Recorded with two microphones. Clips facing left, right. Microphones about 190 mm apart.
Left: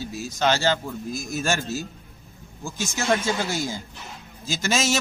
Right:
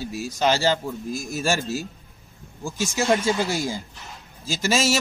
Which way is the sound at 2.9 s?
10° right (ahead or behind).